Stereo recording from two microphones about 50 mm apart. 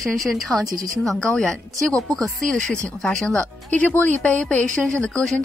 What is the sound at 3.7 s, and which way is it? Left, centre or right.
Speech, left.